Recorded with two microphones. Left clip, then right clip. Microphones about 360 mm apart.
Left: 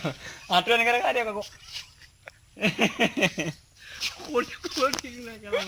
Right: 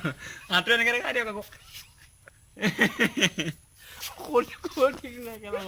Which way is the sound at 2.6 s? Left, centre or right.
Centre.